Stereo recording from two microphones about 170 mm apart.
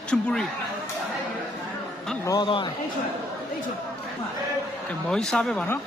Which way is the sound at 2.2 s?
25° left (ahead or behind).